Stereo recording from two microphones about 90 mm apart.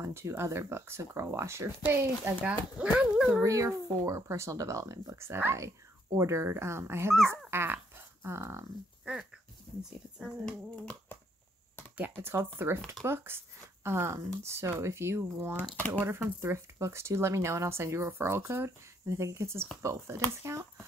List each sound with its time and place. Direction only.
0.0 s speech: 30° right (ahead or behind)
2.4 s speech: 10° right (ahead or behind)
3.4 s speech: 40° right (ahead or behind)
7.2 s dog: 25° right (ahead or behind)
9.1 s speech: 10° right (ahead or behind)
10.4 s speech: 10° left (ahead or behind)
12.0 s speech: 25° right (ahead or behind)